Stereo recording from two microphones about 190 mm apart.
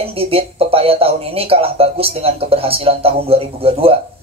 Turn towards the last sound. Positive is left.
turn(degrees=-30)  # may be behind; listen again after turning